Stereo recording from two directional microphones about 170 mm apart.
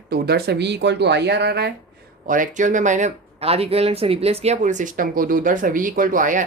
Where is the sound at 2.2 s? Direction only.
50° right (ahead or behind).